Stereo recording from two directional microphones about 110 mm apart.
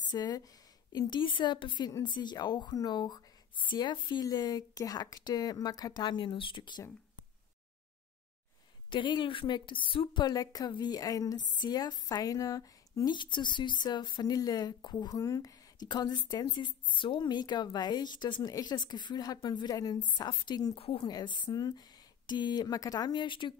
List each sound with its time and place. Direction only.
0.1 s a woman's voice: 35° left (ahead or behind)
8.9 s a woman's voice: 45° left (ahead or behind)
20.7 s speech: 55° left (ahead or behind)
21.0 s a woman's voice: 40° left (ahead or behind)